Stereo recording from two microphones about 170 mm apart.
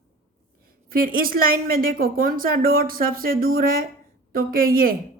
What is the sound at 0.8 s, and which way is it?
A woman's voice, 60° right (ahead or behind).